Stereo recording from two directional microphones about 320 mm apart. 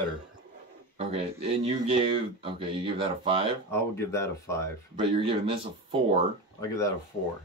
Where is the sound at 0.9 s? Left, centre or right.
Centre.